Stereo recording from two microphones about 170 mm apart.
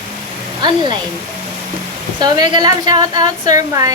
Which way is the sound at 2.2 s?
25° right (ahead or behind).